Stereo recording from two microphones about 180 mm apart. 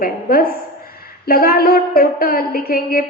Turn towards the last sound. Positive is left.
turn(degrees=55)  # may be behind; listen again after turning